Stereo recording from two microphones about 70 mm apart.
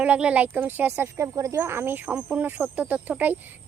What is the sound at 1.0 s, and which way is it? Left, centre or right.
Speech, right.